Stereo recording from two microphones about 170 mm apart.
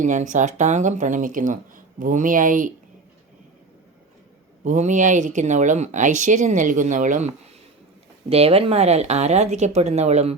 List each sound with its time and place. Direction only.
0.0 s speech: 45° right (ahead or behind)
4.6 s speech: 45° right (ahead or behind)
8.3 s speech: 35° right (ahead or behind)